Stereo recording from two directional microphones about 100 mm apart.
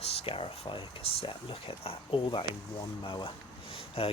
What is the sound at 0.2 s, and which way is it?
Speech, 70° left (ahead or behind).